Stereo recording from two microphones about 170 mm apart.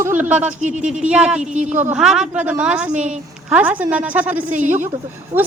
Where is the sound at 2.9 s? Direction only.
45° right (ahead or behind).